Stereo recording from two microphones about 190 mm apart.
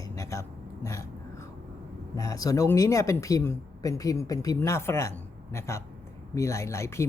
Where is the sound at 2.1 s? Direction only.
20° left (ahead or behind).